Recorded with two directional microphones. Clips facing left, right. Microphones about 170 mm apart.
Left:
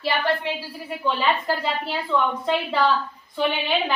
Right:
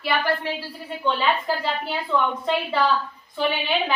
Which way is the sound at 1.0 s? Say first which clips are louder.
Even; centre (ahead or behind).